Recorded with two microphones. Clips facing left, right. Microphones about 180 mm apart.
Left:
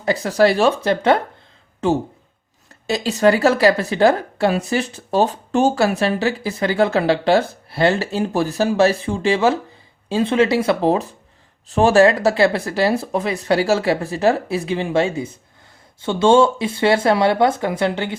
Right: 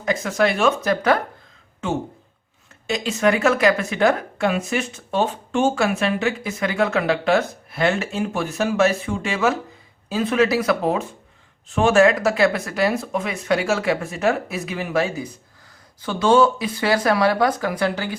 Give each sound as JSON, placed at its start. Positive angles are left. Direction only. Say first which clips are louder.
{"t": 0.0, "sound": "speech", "louder": "left 4 dB", "side_deg": 35}
{"t": 2.8, "sound": "speech", "louder": "left 4 dB", "side_deg": 35}